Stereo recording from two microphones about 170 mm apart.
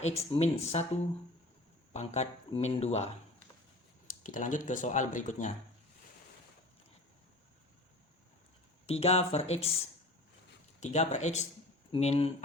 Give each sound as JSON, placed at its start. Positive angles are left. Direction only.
{"t": 0.0, "sound": "speech", "side_deg": 40}
{"t": 4.0, "sound": "speech", "side_deg": 50}
{"t": 8.9, "sound": "speech", "side_deg": 35}
{"t": 10.8, "sound": "speech", "side_deg": 40}